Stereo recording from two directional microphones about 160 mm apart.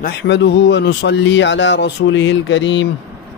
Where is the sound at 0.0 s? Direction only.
90° left.